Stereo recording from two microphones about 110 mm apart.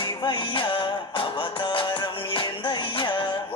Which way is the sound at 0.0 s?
45° left (ahead or behind).